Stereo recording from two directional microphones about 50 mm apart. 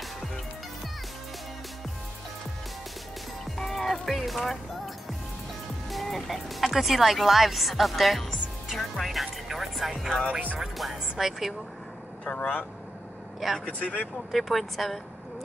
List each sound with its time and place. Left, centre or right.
3.4 s music: centre
5.9 s speech: centre
12.3 s speech: left
13.7 s speech: left
14.3 s speech: centre